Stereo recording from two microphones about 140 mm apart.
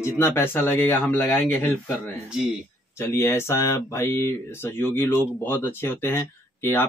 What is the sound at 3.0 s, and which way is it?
Speech, 20° left (ahead or behind).